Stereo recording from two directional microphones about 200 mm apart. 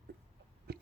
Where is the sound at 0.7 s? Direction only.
50° right (ahead or behind).